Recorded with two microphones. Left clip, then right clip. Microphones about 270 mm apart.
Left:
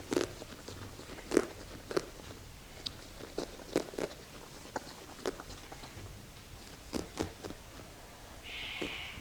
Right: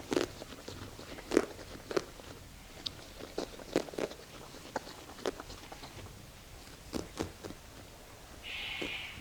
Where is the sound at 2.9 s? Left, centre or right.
Right.